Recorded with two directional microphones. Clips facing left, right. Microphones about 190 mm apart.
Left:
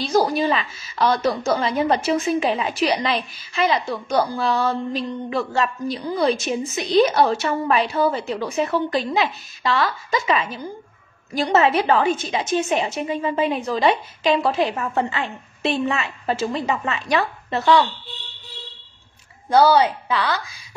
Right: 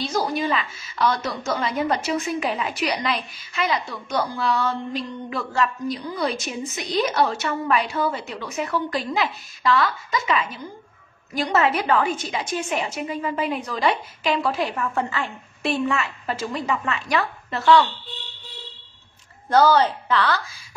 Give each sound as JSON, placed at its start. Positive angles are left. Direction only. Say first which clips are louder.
{"t": 0.1, "sound": "a woman's voice", "louder": "left 7 dB", "side_deg": 35}
{"t": 19.5, "sound": "a woman's voice", "louder": "left 2 dB", "side_deg": 10}